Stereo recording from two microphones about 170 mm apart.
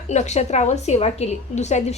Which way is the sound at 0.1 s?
40° left (ahead or behind).